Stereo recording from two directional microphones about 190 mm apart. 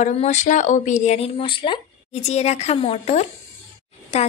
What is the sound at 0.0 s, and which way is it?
A woman's voice, 35° left (ahead or behind).